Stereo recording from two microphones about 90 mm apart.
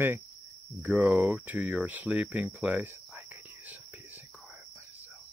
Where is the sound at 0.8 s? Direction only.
10° right (ahead or behind).